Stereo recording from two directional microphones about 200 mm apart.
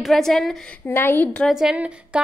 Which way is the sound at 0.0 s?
Centre (ahead or behind).